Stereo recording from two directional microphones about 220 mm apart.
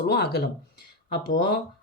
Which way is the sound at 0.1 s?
50° left (ahead or behind).